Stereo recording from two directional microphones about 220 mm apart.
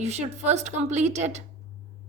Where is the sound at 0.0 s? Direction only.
30° right (ahead or behind).